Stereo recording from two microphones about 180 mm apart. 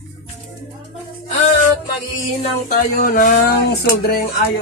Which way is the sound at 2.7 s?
50° left (ahead or behind).